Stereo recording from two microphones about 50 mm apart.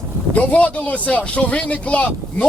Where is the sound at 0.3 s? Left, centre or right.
Left.